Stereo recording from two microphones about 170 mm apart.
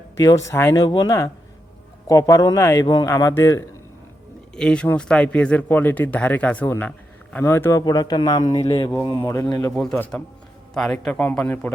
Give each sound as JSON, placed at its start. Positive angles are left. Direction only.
{"t": 0.2, "sound": "a man's voice", "side_deg": 20}
{"t": 4.5, "sound": "a man's voice", "side_deg": 5}
{"t": 8.6, "sound": "speech", "side_deg": 35}
{"t": 9.0, "sound": "speech", "side_deg": 20}